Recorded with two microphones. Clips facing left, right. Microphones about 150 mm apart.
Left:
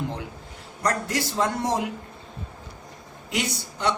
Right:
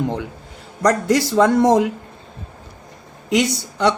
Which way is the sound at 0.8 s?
90° right.